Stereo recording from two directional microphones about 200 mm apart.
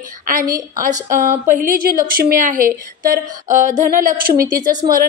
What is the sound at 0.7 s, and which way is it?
A woman's voice, 40° right (ahead or behind).